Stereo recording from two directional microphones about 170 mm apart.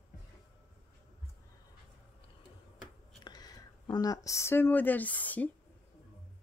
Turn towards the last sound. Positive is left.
turn(degrees=10)  # may be behind; listen again after turning